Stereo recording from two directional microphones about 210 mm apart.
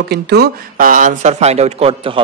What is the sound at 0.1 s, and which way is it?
A man's voice, 50° right (ahead or behind).